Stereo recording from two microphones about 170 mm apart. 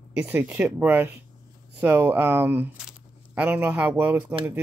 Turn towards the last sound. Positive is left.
turn(degrees=-10)  # may be behind; listen again after turning